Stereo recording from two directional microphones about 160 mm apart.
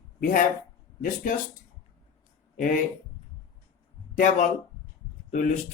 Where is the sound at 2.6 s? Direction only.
55° left (ahead or behind).